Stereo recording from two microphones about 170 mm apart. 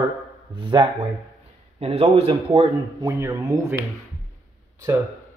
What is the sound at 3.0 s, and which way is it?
Speech, 20° right (ahead or behind).